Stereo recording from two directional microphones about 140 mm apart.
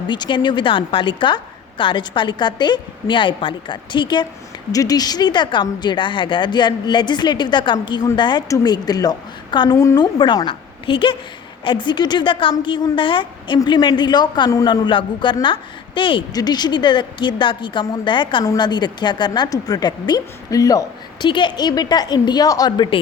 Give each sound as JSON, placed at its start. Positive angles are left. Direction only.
{"t": 0.1, "sound": "a man's voice", "side_deg": 35}